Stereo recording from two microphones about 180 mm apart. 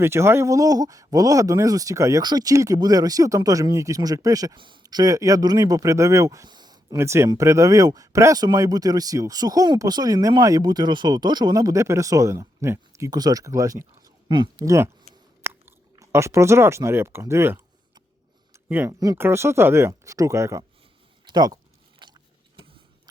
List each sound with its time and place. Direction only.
0.0 s speech: 15° right (ahead or behind)
15.4 s chewing: 15° right (ahead or behind)
18.7 s speech: 15° right (ahead or behind)
21.2 s a sound: 20° right (ahead or behind)